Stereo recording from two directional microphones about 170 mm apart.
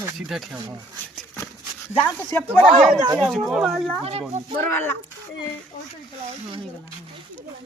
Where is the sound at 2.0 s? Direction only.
10° left (ahead or behind).